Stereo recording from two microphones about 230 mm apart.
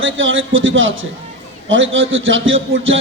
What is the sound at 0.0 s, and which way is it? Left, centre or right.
A man's voice, right.